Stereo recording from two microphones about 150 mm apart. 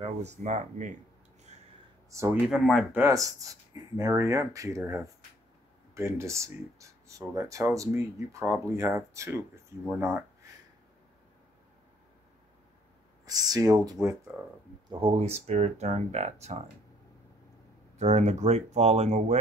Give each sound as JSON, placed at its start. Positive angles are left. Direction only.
{"t": 0.0, "sound": "speech", "side_deg": -50}
{"t": 2.0, "sound": "speech", "side_deg": -20}
{"t": 2.4, "sound": "speech", "side_deg": 0}
{"t": 2.9, "sound": "speech", "side_deg": -20}
{"t": 13.2, "sound": "speech", "side_deg": -25}
{"t": 14.9, "sound": "speech", "side_deg": -35}
{"t": 17.9, "sound": "speech", "side_deg": -50}